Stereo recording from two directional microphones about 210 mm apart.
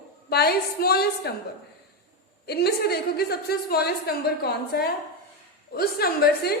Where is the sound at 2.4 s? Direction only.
50° left (ahead or behind).